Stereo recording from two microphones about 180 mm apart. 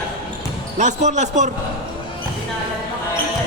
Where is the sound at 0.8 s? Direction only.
40° right (ahead or behind).